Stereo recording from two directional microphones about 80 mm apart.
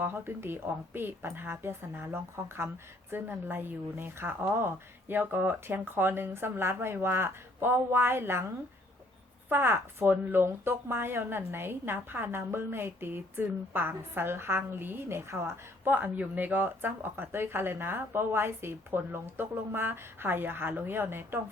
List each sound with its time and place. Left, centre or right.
0.0 s speech: right
9.5 s speech: right